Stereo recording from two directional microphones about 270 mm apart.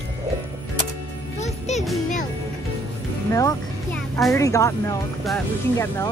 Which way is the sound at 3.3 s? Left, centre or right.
Centre.